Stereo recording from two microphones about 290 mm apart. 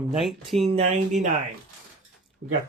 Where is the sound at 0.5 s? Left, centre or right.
Right.